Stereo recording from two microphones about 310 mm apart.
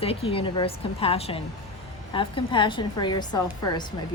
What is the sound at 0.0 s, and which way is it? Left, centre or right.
A woman's voice, centre.